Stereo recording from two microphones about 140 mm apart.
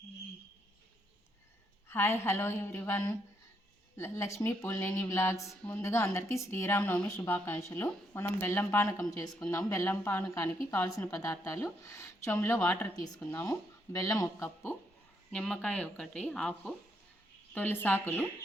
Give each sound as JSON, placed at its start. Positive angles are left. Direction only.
{"t": 1.9, "sound": "speech", "side_deg": 15}
{"t": 15.3, "sound": "speech", "side_deg": 5}